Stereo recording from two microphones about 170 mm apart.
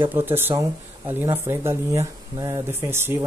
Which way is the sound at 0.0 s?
10° right (ahead or behind).